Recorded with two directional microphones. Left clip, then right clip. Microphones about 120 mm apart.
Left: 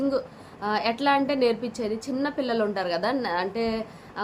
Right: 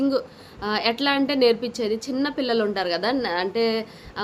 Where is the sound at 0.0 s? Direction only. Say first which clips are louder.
Right 3 dB; 20° right (ahead or behind).